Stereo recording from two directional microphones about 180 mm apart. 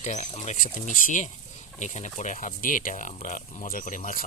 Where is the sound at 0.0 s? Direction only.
40° left (ahead or behind).